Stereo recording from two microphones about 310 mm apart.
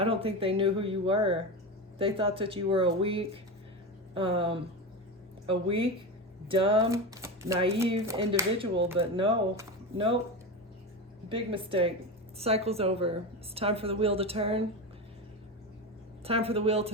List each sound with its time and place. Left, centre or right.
0.0 s speech: centre
11.3 s a woman's voice: centre
16.2 s a woman's voice: centre